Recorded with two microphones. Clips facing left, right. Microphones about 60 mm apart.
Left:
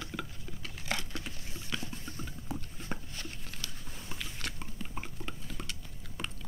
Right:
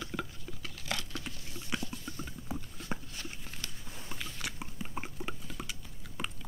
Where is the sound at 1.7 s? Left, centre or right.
Centre.